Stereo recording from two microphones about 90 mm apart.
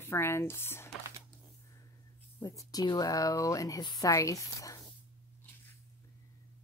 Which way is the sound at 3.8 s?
55° left (ahead or behind).